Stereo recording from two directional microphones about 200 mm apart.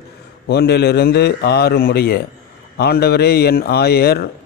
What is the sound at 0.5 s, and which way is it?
A man's voice, 55° left (ahead or behind).